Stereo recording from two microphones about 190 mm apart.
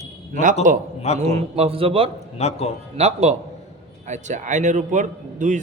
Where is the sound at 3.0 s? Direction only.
35° right (ahead or behind).